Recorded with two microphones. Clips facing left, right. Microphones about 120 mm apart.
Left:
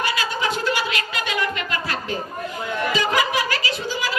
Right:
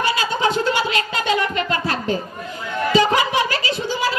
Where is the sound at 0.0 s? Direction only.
25° right (ahead or behind).